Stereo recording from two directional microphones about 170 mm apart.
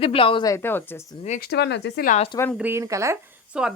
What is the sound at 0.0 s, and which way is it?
Speech, 35° left (ahead or behind).